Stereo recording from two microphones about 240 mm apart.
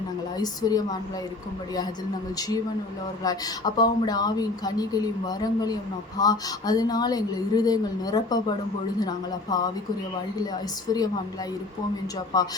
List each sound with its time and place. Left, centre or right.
0.3 s speech: centre
3.2 s speech: centre
12.3 s speech: centre